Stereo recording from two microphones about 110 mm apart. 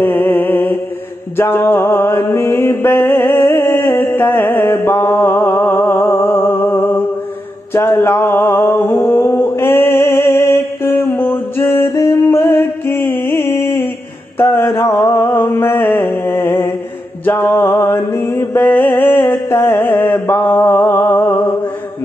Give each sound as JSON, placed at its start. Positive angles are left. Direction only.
{"t": 0.0, "sound": "a sound", "side_deg": 20}
{"t": 1.3, "sound": "music", "side_deg": 20}
{"t": 9.1, "sound": "mantra", "side_deg": 25}